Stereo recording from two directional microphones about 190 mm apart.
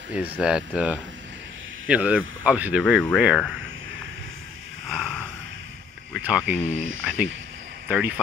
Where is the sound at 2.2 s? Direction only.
90° right.